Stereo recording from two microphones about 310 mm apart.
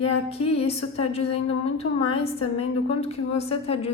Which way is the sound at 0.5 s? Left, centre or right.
Centre.